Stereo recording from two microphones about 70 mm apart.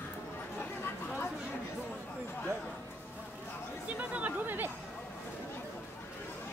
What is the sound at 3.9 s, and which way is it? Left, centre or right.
Chatter, right.